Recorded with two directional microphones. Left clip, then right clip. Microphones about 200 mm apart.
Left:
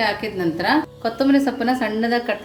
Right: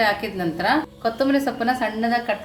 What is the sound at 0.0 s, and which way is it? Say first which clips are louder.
A woman's voice: even; centre (ahead or behind).